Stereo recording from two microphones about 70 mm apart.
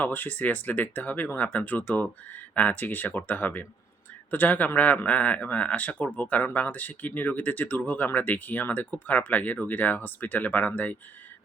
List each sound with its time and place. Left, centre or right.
0.0 s a man's voice: left